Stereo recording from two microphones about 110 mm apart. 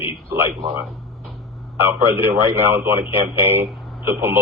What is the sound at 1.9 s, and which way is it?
Speech, 20° right (ahead or behind).